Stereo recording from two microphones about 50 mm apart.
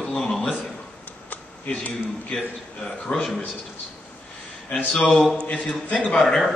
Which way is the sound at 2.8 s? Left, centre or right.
Left.